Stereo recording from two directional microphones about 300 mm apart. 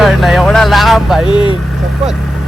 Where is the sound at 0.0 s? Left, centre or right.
Centre.